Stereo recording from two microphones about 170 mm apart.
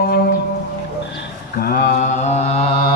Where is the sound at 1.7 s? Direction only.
60° left (ahead or behind); by 2.9 s 40° left (ahead or behind).